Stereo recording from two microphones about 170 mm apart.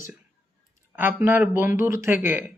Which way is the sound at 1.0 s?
10° right (ahead or behind).